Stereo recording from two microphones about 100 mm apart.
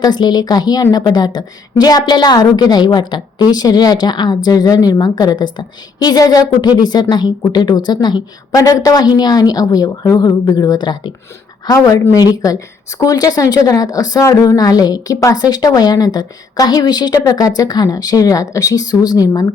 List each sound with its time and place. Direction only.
0.0 s a woman's voice: 45° left (ahead or behind)
8.5 s speech: 35° left (ahead or behind)
11.7 s speech: 35° left (ahead or behind)